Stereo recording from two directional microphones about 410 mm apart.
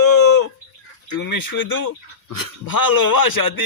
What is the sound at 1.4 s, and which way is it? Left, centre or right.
Speech, left.